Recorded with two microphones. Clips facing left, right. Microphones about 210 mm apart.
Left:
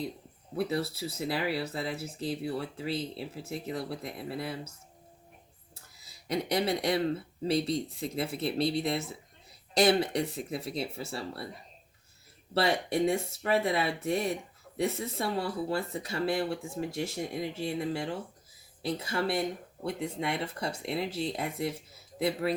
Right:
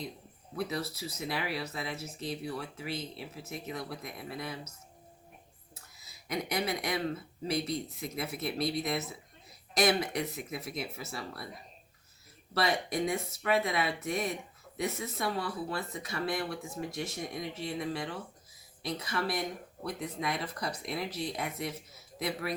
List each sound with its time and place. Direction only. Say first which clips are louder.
0.5 s speech: left 4 dB; 30° left (ahead or behind)
6.2 s speech: left 4 dB; 30° left (ahead or behind)
12.5 s speech: left 3 dB; 30° left (ahead or behind)